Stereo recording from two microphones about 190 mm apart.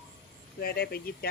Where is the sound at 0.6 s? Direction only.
55° left (ahead or behind).